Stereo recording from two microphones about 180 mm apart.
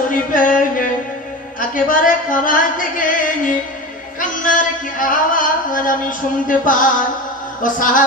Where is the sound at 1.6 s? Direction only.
50° left (ahead or behind).